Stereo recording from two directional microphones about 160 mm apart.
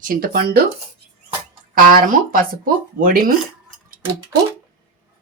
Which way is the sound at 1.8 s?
60° right (ahead or behind).